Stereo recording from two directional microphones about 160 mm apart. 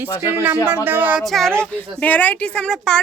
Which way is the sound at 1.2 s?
Centre (ahead or behind).